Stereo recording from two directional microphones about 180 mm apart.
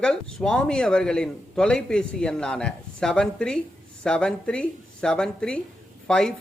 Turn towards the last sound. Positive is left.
turn(degrees=5)  # may be behind; listen again after turning